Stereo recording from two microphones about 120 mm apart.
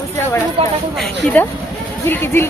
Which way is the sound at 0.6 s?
50° right (ahead or behind).